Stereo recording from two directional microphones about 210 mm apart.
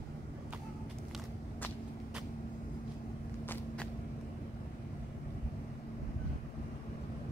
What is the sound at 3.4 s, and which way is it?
Vehicle, 10° left (ahead or behind).